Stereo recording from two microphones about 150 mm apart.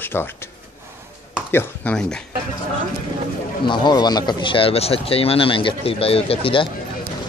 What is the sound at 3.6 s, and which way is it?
Speech, 30° left (ahead or behind).